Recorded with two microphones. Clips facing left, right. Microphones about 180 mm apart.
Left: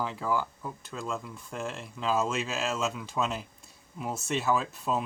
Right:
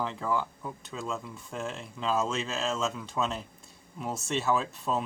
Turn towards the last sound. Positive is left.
turn(degrees=0)  # may be behind; listen again after turning